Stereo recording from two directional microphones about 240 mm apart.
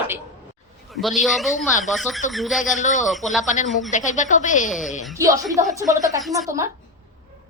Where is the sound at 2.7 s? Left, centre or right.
Left.